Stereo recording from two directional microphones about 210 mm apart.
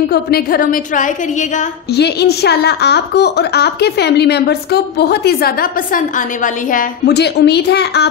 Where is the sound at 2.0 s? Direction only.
50° left (ahead or behind).